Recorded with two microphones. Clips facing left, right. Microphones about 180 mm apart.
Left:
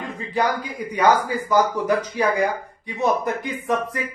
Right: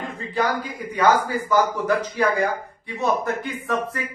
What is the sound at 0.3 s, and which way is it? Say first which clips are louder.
Speech: left 1 dB; 15° left (ahead or behind).